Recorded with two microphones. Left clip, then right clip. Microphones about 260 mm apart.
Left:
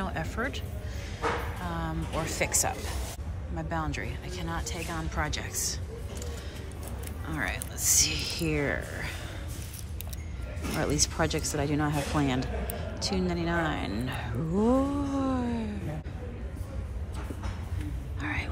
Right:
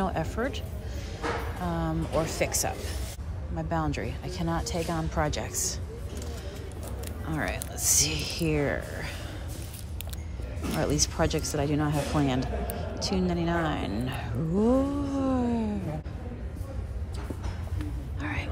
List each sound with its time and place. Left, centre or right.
0.0 s music: centre
1.6 s speech: centre
7.2 s speech: centre
10.8 s speech: centre
18.2 s whispering: centre